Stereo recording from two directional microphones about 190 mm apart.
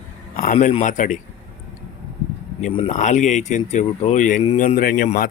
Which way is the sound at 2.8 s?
40° left (ahead or behind).